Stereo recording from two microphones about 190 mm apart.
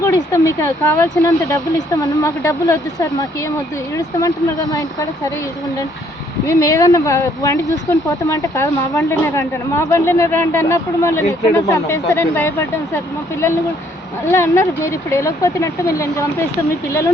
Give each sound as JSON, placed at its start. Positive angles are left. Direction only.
{"t": 0.0, "sound": "speech", "side_deg": 15}
{"t": 4.7, "sound": "speech", "side_deg": 15}
{"t": 6.4, "sound": "speech", "side_deg": 15}
{"t": 14.3, "sound": "speech", "side_deg": 15}